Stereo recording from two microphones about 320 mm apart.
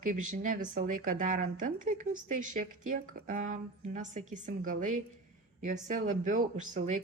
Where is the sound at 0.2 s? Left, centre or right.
Right.